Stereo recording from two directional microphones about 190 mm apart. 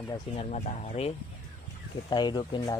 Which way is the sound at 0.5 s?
35° left (ahead or behind).